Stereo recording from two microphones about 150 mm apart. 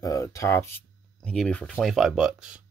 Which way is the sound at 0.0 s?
20° left (ahead or behind).